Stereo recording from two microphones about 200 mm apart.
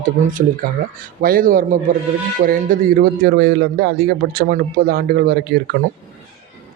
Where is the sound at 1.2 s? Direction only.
45° right (ahead or behind).